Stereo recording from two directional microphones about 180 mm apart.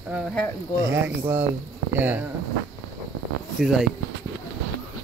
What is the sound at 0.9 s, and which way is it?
Speech, 10° right (ahead or behind).